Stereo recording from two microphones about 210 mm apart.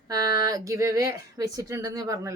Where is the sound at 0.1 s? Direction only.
15° right (ahead or behind).